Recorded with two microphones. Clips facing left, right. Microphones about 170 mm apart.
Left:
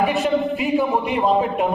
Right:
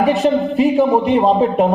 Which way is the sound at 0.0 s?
35° right (ahead or behind).